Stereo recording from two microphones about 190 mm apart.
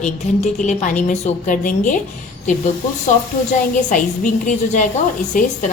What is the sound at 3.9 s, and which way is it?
A woman's voice, 40° left (ahead or behind).